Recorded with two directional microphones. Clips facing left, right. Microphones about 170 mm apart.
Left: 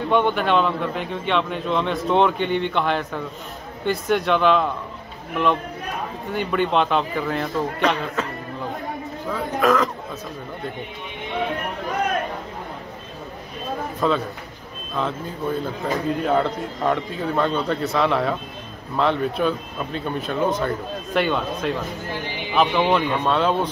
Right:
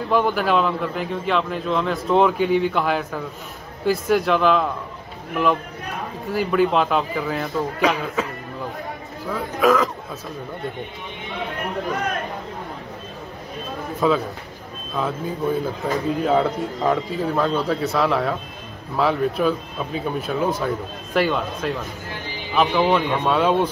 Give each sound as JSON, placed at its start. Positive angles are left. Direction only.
{"t": 0.1, "sound": "a man's voice", "side_deg": -5}
{"t": 6.3, "sound": "a man's voice", "side_deg": -5}
{"t": 9.3, "sound": "a man's voice", "side_deg": -5}
{"t": 14.0, "sound": "a man's voice", "side_deg": -5}